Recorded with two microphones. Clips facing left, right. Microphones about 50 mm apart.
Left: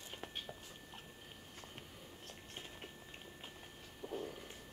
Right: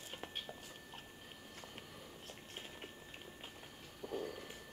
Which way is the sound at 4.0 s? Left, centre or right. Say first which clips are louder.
Right 1 dB; centre.